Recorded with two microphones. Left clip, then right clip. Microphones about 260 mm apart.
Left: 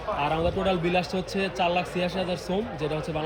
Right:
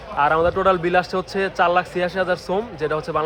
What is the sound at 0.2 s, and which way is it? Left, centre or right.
Speech, centre.